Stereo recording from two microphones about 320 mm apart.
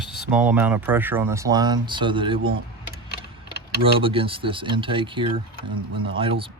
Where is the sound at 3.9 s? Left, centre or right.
Centre.